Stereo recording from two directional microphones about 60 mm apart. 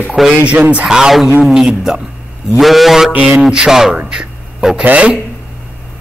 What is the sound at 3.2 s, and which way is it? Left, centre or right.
Speech, centre.